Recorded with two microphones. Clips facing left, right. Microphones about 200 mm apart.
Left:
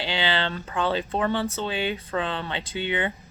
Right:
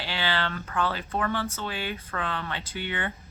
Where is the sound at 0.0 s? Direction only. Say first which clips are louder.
Left 3 dB; 20° left (ahead or behind).